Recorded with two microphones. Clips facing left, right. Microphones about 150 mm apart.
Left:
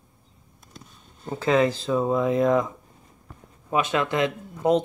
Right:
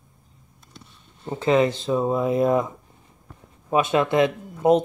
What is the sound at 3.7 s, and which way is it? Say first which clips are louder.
Speech: right 4 dB; 20° right (ahead or behind).